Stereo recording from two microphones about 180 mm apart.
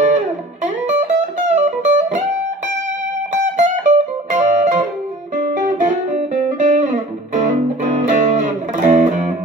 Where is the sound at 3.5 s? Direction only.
45° right (ahead or behind).